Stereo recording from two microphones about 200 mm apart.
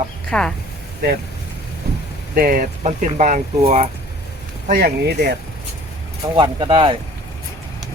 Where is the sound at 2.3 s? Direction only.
45° right (ahead or behind).